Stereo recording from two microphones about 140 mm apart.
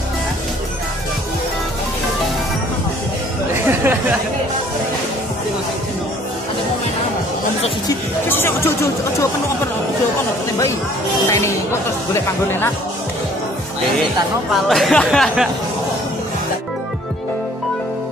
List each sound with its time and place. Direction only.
3.5 s chatter: 15° right (ahead or behind)
8.3 s speech: 15° left (ahead or behind)
11.2 s speech: 20° left (ahead or behind)
14.5 s speech: centre (ahead or behind)